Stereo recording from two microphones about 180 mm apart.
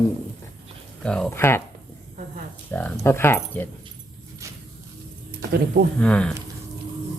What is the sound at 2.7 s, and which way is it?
Speech, 10° left (ahead or behind).